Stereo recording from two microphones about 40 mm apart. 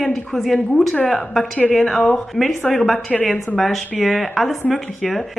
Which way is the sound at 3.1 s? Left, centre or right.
Centre.